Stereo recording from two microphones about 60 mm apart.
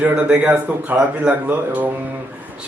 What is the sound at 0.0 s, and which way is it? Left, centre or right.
Speech, right.